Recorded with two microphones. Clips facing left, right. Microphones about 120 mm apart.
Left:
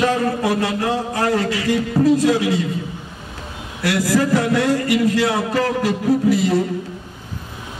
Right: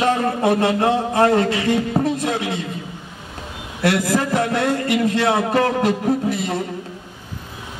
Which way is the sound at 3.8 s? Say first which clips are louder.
Left 1 dB; 55° right (ahead or behind).